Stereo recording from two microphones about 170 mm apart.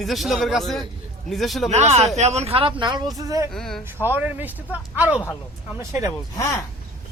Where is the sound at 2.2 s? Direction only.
40° right (ahead or behind).